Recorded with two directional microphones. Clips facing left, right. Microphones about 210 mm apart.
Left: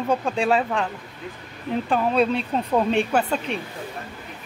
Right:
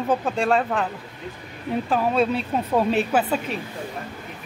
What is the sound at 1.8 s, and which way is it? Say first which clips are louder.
A woman's voice: left 1 dB; centre (ahead or behind).